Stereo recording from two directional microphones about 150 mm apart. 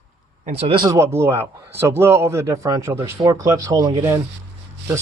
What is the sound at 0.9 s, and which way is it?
A man's voice, 20° right (ahead or behind).